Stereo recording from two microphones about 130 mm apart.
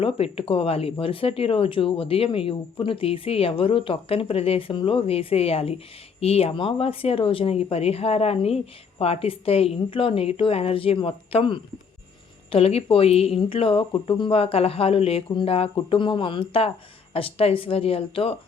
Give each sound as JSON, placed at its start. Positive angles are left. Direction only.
{"t": 0.0, "sound": "speech", "side_deg": 45}